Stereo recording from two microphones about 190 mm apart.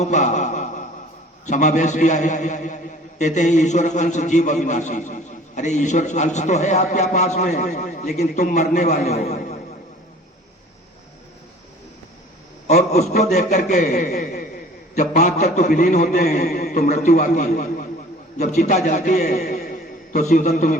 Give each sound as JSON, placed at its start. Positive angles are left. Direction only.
{"t": 0.0, "sound": "a man's voice", "side_deg": 40}
{"t": 12.6, "sound": "a man's voice", "side_deg": 35}